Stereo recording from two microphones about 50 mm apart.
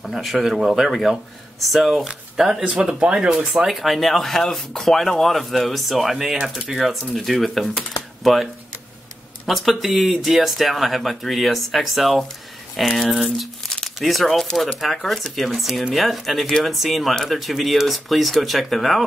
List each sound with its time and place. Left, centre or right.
0.0 s speech: centre
2.6 s speech: right
3.6 s speech: centre
9.5 s speech: centre